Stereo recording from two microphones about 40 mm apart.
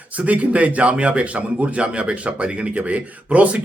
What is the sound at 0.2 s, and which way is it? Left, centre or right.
A man's voice, right.